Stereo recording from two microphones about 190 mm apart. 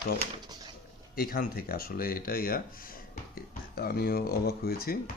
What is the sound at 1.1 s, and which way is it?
Speech, 50° left (ahead or behind).